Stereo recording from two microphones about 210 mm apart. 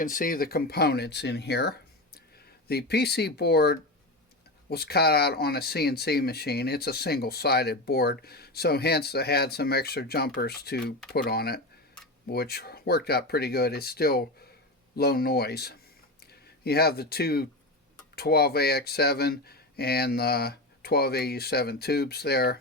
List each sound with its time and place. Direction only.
0.0 s speech: 40° left (ahead or behind)